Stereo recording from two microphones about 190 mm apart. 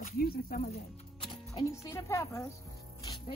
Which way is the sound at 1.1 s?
25° left (ahead or behind).